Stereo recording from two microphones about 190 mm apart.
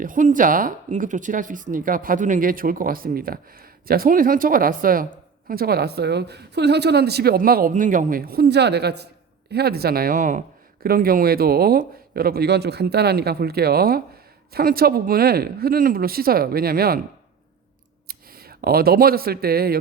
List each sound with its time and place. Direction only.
0.0 s speech: 45° right (ahead or behind)
18.1 s speech: 50° right (ahead or behind)